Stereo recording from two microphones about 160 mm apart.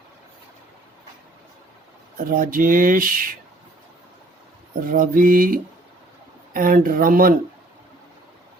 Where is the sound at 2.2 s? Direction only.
60° right (ahead or behind).